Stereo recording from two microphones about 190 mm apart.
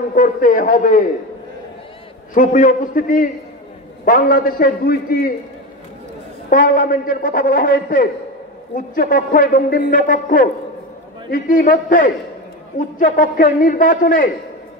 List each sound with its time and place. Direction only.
0.1 s a man's voice: 45° left (ahead or behind)
2.3 s a man's voice: 45° left (ahead or behind)
6.5 s a man's voice: 45° left (ahead or behind)